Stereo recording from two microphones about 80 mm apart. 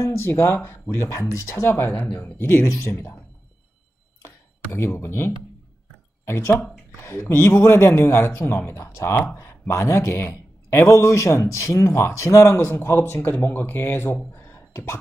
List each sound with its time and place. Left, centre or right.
0.0 s a man's voice: left
4.7 s a man's voice: left